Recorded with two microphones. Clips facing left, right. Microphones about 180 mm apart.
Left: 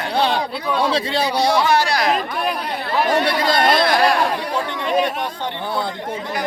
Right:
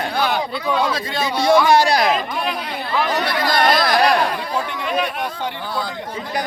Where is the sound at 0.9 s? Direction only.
35° left (ahead or behind).